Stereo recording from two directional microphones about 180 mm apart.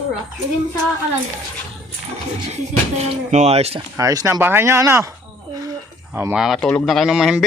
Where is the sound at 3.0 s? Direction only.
40° right (ahead or behind).